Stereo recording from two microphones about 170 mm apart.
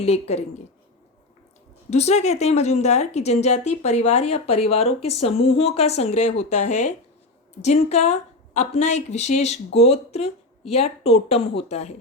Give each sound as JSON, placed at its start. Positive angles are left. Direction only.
{"t": 0.0, "sound": "speech", "side_deg": 40}
{"t": 1.9, "sound": "speech", "side_deg": 40}